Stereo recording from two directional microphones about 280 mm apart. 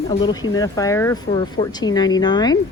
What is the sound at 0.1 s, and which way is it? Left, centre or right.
Speech, centre.